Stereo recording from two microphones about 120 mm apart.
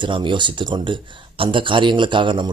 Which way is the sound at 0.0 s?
40° right (ahead or behind).